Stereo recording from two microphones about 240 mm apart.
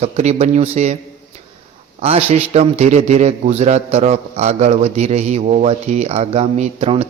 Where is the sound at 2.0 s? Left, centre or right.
Right.